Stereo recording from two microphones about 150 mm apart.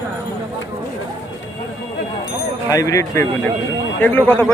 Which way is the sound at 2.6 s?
20° left (ahead or behind).